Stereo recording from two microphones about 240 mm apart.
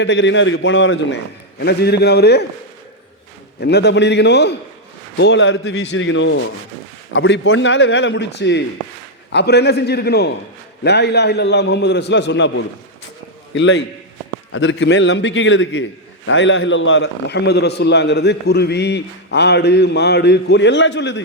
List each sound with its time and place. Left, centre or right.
0.0 s a man's voice: left
3.6 s a man's voice: left